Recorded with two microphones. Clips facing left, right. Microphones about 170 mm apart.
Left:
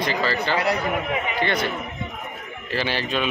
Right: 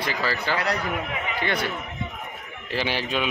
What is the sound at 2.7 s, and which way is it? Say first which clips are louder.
Speech: left 1 dB; 15° right (ahead or behind).